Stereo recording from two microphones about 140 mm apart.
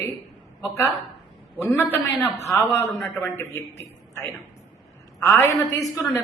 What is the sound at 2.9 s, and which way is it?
Speech, centre (ahead or behind).